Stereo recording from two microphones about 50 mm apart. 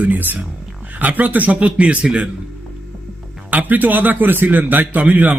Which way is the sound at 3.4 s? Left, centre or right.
Right.